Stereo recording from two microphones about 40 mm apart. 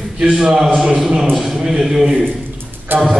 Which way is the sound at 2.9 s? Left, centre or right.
Right.